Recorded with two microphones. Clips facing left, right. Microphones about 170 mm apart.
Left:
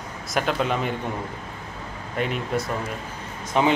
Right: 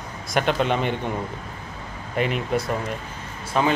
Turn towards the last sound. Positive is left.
turn(degrees=20)  # may be behind; listen again after turning